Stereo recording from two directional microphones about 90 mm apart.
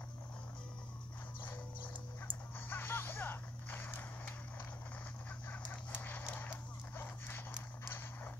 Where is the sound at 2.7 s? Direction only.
25° left (ahead or behind).